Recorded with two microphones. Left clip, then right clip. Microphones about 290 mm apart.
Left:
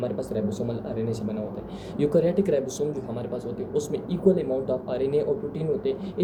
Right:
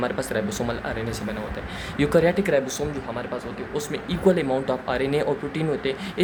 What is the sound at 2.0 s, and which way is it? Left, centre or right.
Speech, centre.